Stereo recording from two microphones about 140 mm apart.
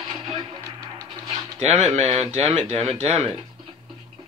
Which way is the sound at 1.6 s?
50° right (ahead or behind).